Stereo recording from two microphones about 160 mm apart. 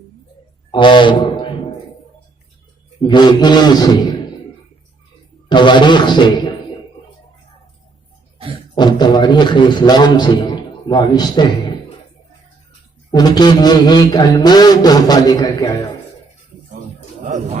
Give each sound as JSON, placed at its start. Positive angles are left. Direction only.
{"t": 0.7, "sound": "speech", "side_deg": 30}
{"t": 3.0, "sound": "a man's voice", "side_deg": 30}
{"t": 5.5, "sound": "a man's voice", "side_deg": 30}
{"t": 8.7, "sound": "a man's voice", "side_deg": 30}
{"t": 13.1, "sound": "a man's voice", "side_deg": 25}